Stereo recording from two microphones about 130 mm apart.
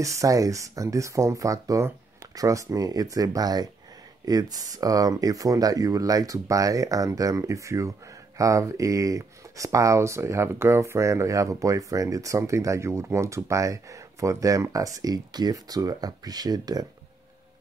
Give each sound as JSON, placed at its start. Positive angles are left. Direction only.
{"t": 0.0, "sound": "speech", "side_deg": -25}